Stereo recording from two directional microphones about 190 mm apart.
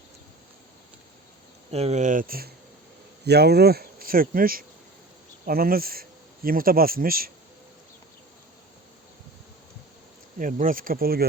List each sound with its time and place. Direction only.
1.7 s speech: 35° right (ahead or behind); by 7.3 s 50° right (ahead or behind)
10.3 s speech: 45° right (ahead or behind)